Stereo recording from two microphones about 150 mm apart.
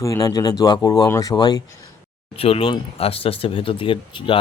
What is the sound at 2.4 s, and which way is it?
Speech, 40° left (ahead or behind).